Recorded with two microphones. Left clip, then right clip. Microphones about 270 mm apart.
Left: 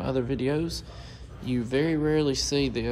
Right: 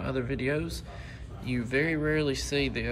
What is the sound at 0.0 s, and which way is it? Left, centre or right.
A man's voice, centre.